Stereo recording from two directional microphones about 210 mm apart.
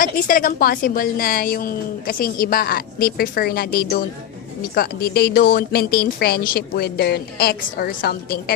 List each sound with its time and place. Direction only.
0.0 s a woman's voice: 40° left (ahead or behind)